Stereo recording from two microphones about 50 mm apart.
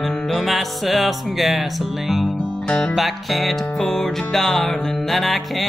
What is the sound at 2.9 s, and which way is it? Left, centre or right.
Music, centre.